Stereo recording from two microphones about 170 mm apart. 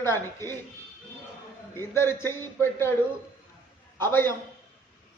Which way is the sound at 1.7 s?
15° left (ahead or behind).